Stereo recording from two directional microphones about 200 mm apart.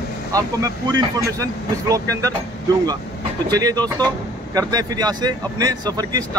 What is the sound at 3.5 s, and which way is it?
Speech, 20° right (ahead or behind).